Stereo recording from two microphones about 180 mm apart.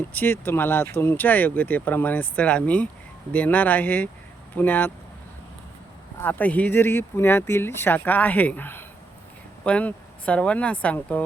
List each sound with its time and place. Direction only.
0.1 s speech: 10° left (ahead or behind)
6.2 s speech: 10° left (ahead or behind)